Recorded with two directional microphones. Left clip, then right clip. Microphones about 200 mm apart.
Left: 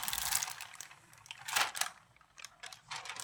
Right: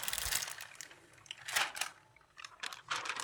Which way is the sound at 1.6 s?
45° left (ahead or behind).